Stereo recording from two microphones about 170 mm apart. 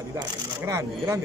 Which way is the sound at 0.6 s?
15° right (ahead or behind).